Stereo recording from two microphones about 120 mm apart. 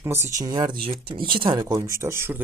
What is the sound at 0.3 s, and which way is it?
Speech, 35° right (ahead or behind).